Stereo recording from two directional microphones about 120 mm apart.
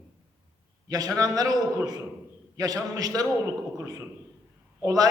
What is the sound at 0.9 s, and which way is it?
A man's voice, 30° right (ahead or behind).